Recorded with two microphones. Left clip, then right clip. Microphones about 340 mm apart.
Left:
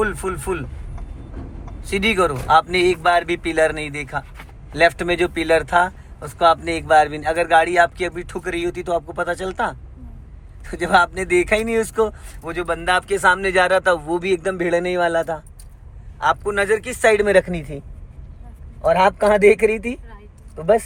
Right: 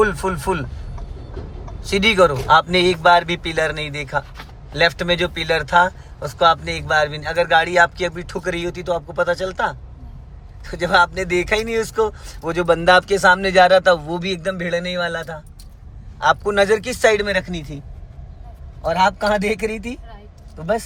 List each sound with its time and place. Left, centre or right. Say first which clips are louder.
0.0 s a man's voice: right 4 dB; centre
1.8 s speech: right 4 dB; centre
17.2 s a man's voice: left 6 dB; centre
18.9 s a man's voice: left 2 dB; centre